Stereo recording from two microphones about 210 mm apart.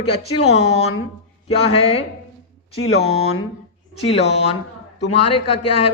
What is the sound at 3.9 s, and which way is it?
Speech, 30° left (ahead or behind).